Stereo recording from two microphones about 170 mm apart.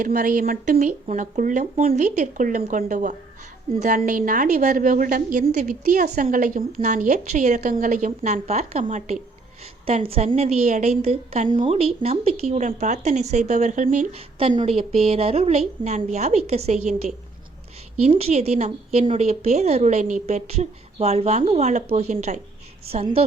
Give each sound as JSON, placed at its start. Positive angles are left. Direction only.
{"t": 0.0, "sound": "a woman's voice", "side_deg": -50}
{"t": 9.8, "sound": "a woman's voice", "side_deg": -35}
{"t": 14.5, "sound": "a woman's voice", "side_deg": -35}